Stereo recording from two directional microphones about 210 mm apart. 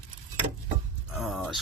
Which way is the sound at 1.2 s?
Centre (ahead or behind).